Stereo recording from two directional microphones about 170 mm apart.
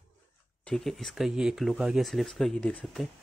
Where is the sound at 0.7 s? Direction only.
Centre (ahead or behind).